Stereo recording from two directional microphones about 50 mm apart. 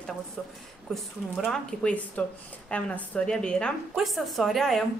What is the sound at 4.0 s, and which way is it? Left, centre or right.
Speech, centre.